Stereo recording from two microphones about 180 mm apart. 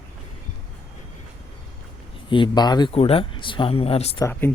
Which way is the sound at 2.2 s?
25° left (ahead or behind).